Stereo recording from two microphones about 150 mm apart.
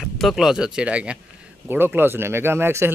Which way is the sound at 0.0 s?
Centre (ahead or behind).